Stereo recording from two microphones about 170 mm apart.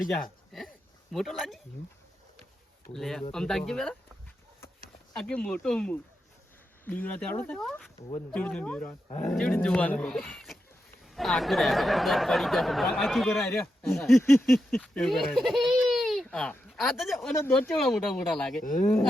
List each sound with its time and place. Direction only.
0.2 s speech: centre (ahead or behind)
2.9 s speech: centre (ahead or behind)
5.1 s speech: 5° left (ahead or behind)
13.4 s speech: 10° left (ahead or behind)
13.8 s speech: centre (ahead or behind)
14.2 s speech: 15° left (ahead or behind)
14.4 s speech: centre (ahead or behind)
17.3 s speech: 10° left (ahead or behind)
18.6 s speech: 50° left (ahead or behind)